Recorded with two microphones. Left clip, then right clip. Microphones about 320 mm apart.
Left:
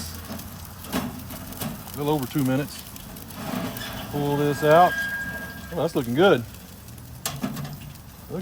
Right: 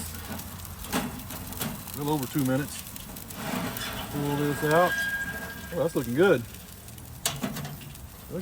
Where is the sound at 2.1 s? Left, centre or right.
Left.